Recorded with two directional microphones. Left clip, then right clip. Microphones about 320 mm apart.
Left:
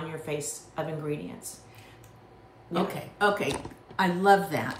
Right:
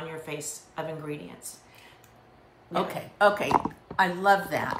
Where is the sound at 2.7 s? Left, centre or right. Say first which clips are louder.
Right 1 dB; right.